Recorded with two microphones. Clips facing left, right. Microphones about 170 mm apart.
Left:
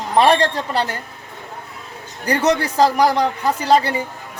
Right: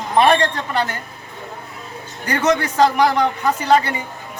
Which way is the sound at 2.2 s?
35° left (ahead or behind).